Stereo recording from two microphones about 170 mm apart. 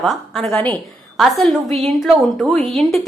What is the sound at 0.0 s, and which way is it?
A woman's voice, centre (ahead or behind).